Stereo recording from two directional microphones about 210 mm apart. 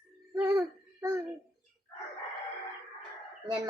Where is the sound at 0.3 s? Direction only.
15° right (ahead or behind).